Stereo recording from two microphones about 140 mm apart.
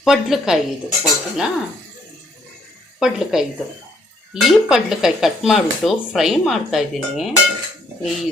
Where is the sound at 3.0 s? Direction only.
5° right (ahead or behind).